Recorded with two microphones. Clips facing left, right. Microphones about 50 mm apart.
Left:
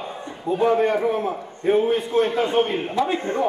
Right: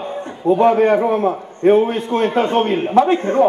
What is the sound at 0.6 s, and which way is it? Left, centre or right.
Speech, right.